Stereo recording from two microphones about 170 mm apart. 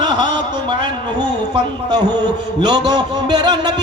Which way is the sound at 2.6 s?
25° right (ahead or behind).